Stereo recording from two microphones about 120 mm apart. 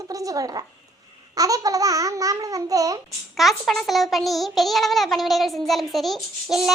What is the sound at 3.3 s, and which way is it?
A child's voice, centre (ahead or behind).